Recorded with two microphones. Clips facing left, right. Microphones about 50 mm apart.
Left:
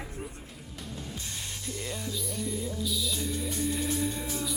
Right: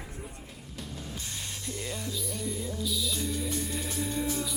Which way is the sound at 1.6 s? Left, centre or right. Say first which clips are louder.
Even; centre.